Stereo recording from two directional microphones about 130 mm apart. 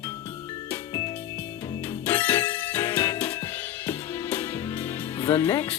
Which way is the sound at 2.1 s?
20° left (ahead or behind).